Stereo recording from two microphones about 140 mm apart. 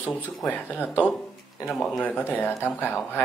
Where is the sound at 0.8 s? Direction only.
15° left (ahead or behind).